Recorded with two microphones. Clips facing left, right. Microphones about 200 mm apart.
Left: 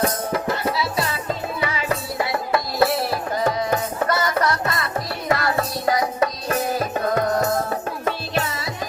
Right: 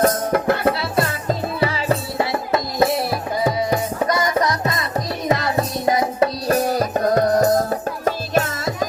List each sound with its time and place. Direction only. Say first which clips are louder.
0.0 s music: right 5 dB; 55° right (ahead or behind)
1.3 s music: right 4 dB; 35° right (ahead or behind)